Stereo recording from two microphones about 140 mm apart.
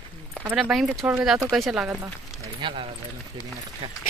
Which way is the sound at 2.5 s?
35° right (ahead or behind).